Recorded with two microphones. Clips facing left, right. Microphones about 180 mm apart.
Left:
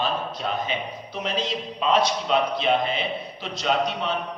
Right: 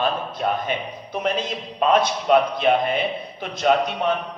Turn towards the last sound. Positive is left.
turn(degrees=-55)  # may be behind; listen again after turning